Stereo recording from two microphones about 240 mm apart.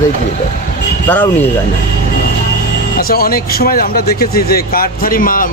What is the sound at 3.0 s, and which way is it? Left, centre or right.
Speech, left.